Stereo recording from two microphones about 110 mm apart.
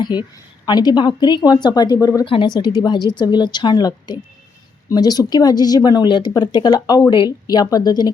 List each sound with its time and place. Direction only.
0.0 s speech: 40° left (ahead or behind)
2.2 s a woman's voice: 55° left (ahead or behind)
2.6 s a woman's voice: 40° left (ahead or behind)